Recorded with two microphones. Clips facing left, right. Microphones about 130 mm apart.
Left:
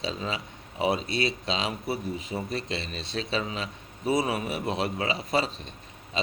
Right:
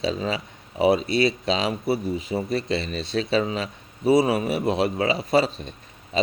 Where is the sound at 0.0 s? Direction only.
40° right (ahead or behind).